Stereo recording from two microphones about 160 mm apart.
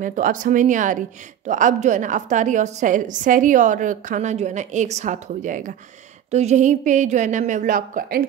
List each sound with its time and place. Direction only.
0.0 s a woman's voice: 55° right (ahead or behind)